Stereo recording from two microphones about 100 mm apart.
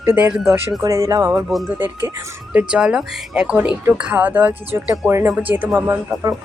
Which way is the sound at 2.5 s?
10° right (ahead or behind).